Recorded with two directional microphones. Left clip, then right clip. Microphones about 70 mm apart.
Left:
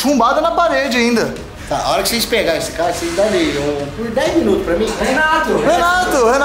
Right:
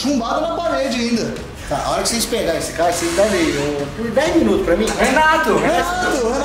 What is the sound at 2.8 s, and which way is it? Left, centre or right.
Speech, centre.